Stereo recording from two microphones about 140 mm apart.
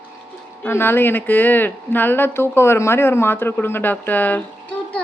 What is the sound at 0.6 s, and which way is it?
A child's voice, 15° left (ahead or behind).